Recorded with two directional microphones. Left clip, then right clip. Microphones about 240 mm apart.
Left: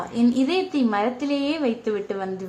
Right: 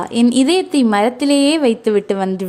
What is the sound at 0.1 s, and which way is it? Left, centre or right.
A woman's voice, right.